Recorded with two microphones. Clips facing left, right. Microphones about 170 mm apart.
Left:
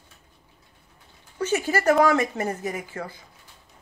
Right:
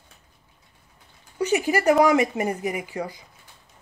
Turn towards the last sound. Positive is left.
turn(degrees=-15)  # may be behind; listen again after turning